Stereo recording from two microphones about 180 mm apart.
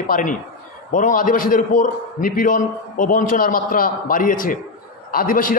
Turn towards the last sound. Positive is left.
turn(degrees=50)  # may be behind; listen again after turning